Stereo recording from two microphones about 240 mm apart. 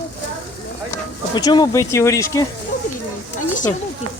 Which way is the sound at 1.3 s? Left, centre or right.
Centre.